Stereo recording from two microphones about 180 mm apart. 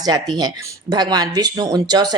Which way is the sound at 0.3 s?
20° right (ahead or behind).